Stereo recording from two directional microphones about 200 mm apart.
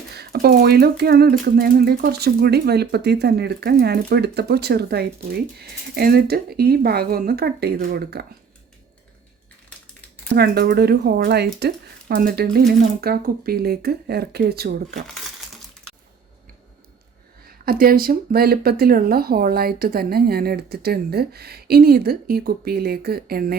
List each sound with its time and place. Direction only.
0.1 s speech: 50° right (ahead or behind)
10.3 s speech: 50° right (ahead or behind)
17.4 s speech: 50° right (ahead or behind)